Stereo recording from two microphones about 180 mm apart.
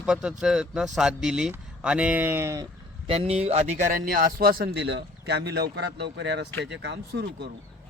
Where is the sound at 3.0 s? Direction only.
30° right (ahead or behind).